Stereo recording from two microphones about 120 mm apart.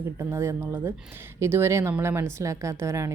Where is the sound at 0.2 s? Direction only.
25° right (ahead or behind).